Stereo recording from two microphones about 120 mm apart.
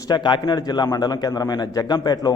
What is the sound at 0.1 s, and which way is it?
A man's voice, 40° left (ahead or behind).